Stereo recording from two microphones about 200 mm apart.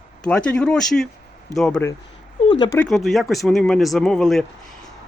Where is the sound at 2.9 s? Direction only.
Centre (ahead or behind).